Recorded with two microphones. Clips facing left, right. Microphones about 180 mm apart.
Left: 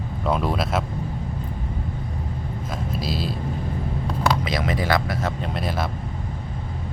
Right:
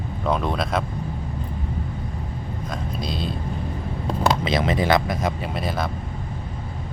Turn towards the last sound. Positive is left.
turn(degrees=0)  # may be behind; listen again after turning